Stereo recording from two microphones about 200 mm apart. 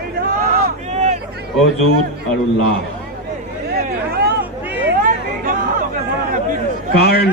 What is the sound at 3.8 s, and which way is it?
Vehicle, 50° right (ahead or behind).